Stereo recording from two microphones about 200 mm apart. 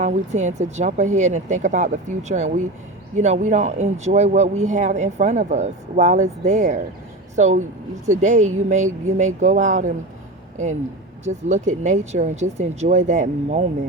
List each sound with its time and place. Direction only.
0.0 s speech: 35° right (ahead or behind)
11.3 s speech: 35° right (ahead or behind)